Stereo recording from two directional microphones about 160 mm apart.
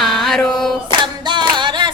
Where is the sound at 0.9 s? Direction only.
30° right (ahead or behind).